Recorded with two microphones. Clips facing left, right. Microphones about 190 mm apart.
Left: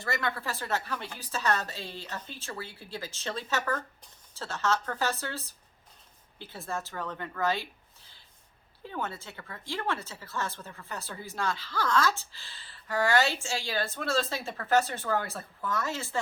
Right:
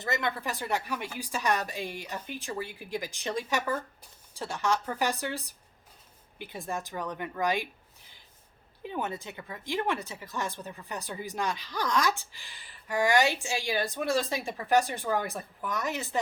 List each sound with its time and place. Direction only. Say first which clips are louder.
0.0 s a woman's voice: right 1 dB; 20° right (ahead or behind)